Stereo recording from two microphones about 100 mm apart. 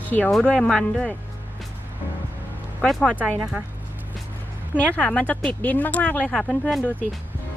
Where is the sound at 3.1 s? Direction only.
15° right (ahead or behind).